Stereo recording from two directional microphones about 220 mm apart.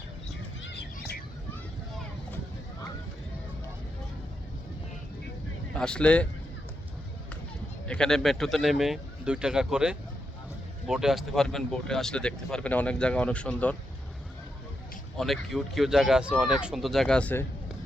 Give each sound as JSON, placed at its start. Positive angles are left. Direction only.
{"t": 0.6, "sound": "a sound", "side_deg": 50}
{"t": 5.7, "sound": "speech", "side_deg": 5}
{"t": 7.9, "sound": "speech", "side_deg": 5}
{"t": 15.2, "sound": "speech", "side_deg": 0}